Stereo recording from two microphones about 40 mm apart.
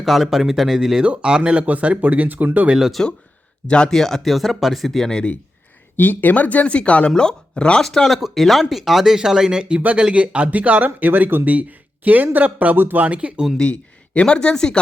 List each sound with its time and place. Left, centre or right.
0.0 s speech: centre
1.0 s speech: right
1.6 s speech: right
3.0 s speech: centre
6.0 s speech: left
6.7 s speech: left
7.9 s speech: centre; by 11.4 s right
11.4 s speech: right
12.7 s speech: right
13.1 s speech: right
13.6 s speech: left